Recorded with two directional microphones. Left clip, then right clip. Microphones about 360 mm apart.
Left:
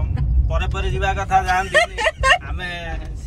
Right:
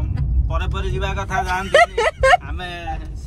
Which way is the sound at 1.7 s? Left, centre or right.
Right.